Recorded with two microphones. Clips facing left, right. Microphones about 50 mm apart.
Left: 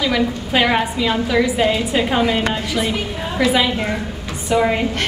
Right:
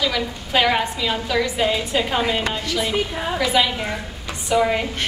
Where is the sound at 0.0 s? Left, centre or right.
Centre.